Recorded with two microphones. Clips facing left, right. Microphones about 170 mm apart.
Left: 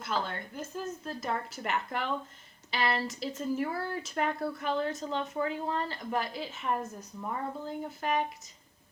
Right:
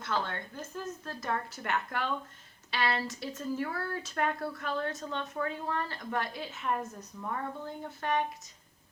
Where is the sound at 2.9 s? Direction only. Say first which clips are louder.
Left 2 dB; 15° left (ahead or behind).